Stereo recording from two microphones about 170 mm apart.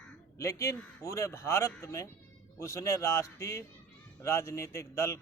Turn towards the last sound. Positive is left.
turn(degrees=15)  # may be behind; listen again after turning